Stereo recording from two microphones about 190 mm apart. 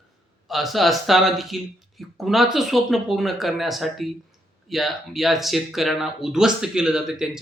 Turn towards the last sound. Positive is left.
turn(degrees=0)  # may be behind; listen again after turning